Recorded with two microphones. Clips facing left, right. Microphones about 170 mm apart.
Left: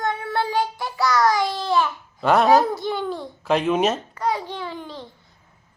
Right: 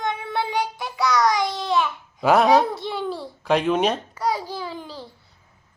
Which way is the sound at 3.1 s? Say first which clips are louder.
Left 1 dB; 35° right (ahead or behind).